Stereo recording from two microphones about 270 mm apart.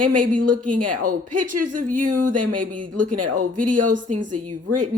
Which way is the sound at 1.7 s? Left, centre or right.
Right.